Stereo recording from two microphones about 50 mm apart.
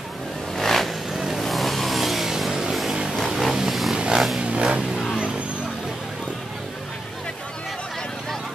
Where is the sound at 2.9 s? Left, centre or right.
Centre.